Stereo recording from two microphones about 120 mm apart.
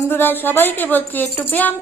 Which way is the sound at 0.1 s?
15° left (ahead or behind).